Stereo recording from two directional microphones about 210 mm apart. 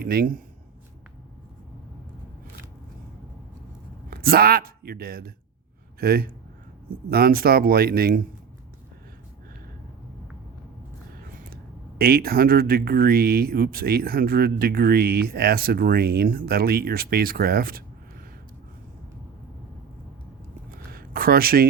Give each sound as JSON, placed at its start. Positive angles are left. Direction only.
{"t": 0.0, "sound": "speech", "side_deg": -45}
{"t": 4.1, "sound": "speech", "side_deg": -45}
{"t": 11.2, "sound": "speech", "side_deg": -45}
{"t": 20.7, "sound": "a sound", "side_deg": -45}